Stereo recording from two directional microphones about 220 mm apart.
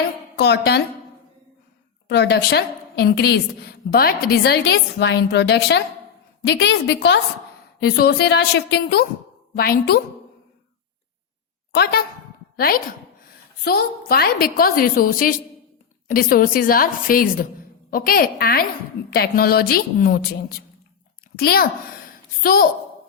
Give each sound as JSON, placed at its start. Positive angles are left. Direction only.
{"t": 0.3, "sound": "a woman's voice", "side_deg": 50}
{"t": 2.0, "sound": "a woman's voice", "side_deg": 50}
{"t": 11.7, "sound": "a woman's voice", "side_deg": 45}